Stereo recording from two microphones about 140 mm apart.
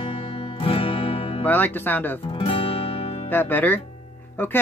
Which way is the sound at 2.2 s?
40° left (ahead or behind).